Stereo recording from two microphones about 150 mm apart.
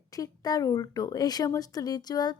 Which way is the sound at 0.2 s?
25° left (ahead or behind).